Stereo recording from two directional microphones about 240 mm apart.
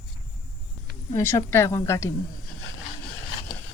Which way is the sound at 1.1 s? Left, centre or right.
Centre.